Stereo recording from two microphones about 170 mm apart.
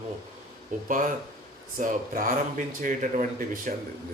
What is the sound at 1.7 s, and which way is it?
Speech, 50° right (ahead or behind).